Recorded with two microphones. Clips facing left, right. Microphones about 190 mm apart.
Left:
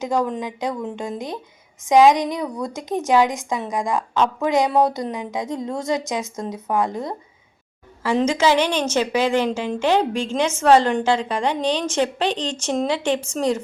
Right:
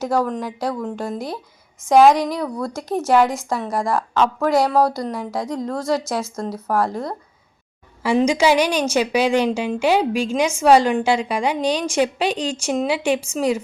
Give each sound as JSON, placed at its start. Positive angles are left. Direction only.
{"t": 0.0, "sound": "a woman's voice", "side_deg": 15}
{"t": 8.0, "sound": "a woman's voice", "side_deg": -15}